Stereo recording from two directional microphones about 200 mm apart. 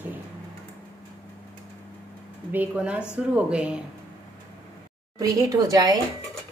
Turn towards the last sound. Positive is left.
turn(degrees=-15)  # may be behind; listen again after turning